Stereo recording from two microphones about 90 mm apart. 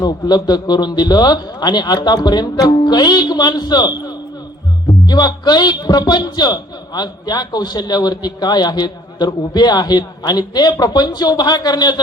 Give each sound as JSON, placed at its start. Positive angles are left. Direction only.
{"t": 0.0, "sound": "a man's voice", "side_deg": 50}